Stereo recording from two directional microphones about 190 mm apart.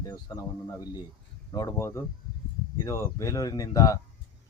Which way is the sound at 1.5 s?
15° left (ahead or behind).